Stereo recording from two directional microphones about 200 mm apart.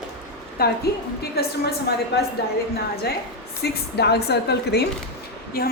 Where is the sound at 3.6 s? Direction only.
55° left (ahead or behind).